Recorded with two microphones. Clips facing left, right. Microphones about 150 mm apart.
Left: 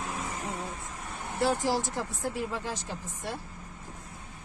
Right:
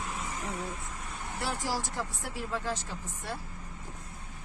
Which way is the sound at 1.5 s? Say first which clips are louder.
Left 5 dB; 25° left (ahead or behind).